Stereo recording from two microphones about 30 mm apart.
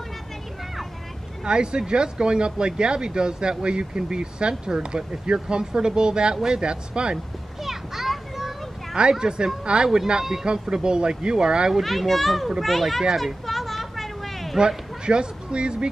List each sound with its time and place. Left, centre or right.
1.4 s speech: right
7.6 s children playing: centre
9.0 s speech: right
11.8 s a child's voice: centre
13.1 s a sound: centre
15.0 s speech: right